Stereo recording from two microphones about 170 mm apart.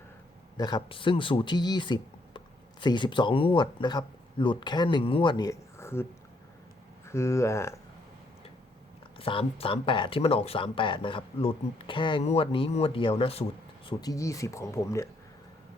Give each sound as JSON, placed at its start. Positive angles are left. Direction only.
{"t": 0.5, "sound": "speech", "side_deg": 25}
{"t": 7.1, "sound": "speech", "side_deg": 15}
{"t": 9.1, "sound": "speech", "side_deg": 30}
{"t": 13.8, "sound": "speech", "side_deg": 20}